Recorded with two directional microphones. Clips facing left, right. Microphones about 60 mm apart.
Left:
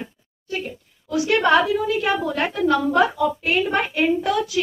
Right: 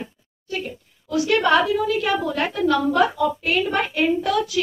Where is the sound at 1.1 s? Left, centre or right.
Left.